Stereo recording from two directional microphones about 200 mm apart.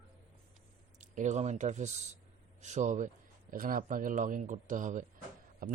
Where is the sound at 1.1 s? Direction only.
35° right (ahead or behind).